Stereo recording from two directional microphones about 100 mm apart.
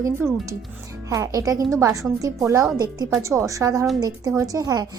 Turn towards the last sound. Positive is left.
turn(degrees=-40)  # may be behind; listen again after turning